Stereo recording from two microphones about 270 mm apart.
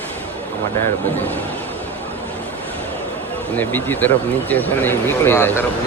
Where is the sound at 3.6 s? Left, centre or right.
Centre.